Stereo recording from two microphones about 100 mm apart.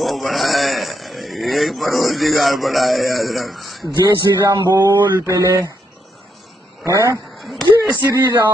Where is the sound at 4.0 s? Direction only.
45° right (ahead or behind).